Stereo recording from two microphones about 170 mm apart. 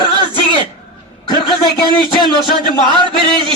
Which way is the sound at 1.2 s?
25° left (ahead or behind).